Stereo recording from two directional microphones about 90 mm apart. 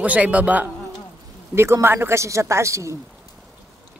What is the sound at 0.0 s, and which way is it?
Speech, 15° right (ahead or behind).